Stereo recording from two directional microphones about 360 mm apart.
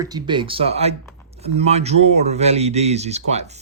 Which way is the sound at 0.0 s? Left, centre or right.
Centre.